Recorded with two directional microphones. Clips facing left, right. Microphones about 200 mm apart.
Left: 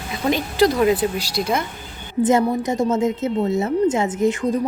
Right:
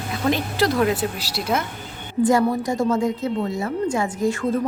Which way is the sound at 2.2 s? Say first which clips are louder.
Left 1 dB; 20° left (ahead or behind).